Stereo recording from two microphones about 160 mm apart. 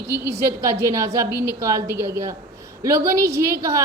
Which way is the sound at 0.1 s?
15° right (ahead or behind).